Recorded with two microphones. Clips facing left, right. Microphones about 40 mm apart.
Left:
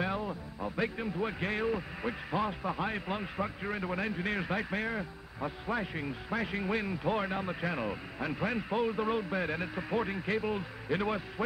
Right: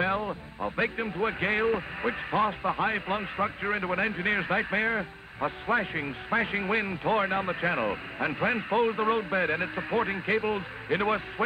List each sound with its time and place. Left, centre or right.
0.0 s a man's voice: right